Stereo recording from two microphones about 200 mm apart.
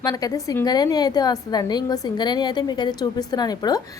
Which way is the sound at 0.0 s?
20° left (ahead or behind).